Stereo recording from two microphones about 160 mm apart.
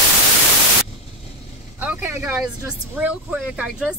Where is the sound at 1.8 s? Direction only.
10° right (ahead or behind).